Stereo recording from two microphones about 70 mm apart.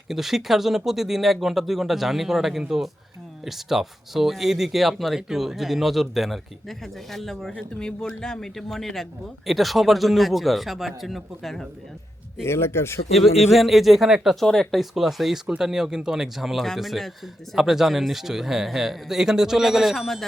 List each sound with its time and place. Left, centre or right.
0.1 s speech: centre
7.5 s speech: centre
12.5 s speech: left
13.1 s speech: centre